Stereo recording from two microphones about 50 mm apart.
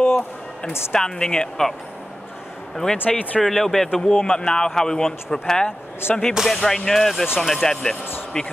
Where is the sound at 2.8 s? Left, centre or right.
Centre.